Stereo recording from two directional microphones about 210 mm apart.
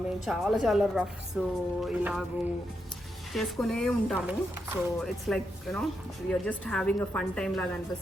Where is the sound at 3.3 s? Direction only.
Centre (ahead or behind).